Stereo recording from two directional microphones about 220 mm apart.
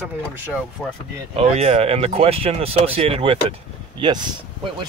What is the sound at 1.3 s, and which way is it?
Speech, 25° right (ahead or behind).